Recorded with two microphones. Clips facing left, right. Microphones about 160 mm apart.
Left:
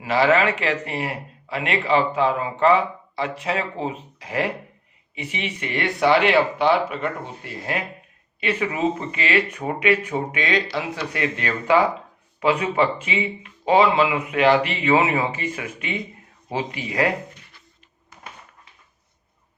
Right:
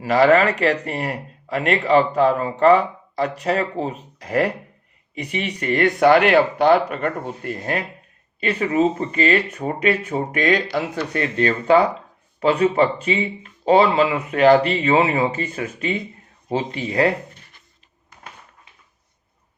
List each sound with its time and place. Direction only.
0.0 s a man's voice: 40° right (ahead or behind)
8.4 s a man's voice: 35° right (ahead or behind)